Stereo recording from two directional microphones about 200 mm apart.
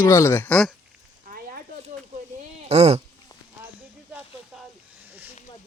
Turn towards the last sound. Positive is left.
turn(degrees=-5)  # may be behind; listen again after turning